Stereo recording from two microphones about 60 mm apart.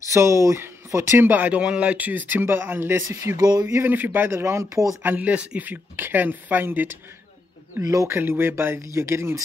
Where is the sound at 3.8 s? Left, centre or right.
Right.